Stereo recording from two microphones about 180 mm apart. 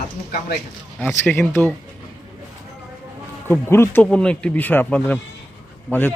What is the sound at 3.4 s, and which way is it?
Speech, 15° left (ahead or behind).